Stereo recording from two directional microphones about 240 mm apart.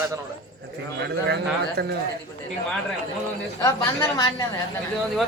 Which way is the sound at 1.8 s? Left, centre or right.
Right.